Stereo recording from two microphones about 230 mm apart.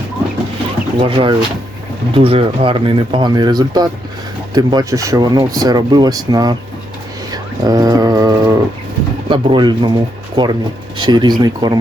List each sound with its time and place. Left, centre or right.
0.9 s speech: right